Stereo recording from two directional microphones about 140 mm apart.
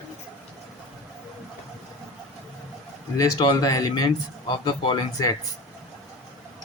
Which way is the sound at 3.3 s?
30° left (ahead or behind).